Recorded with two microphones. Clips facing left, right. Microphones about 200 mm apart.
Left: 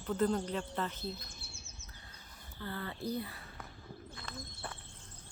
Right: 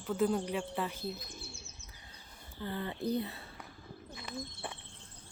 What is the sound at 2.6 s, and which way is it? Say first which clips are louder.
Speech: right 4 dB; 20° right (ahead or behind).